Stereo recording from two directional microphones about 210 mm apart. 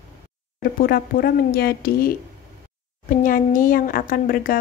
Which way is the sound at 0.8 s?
45° left (ahead or behind).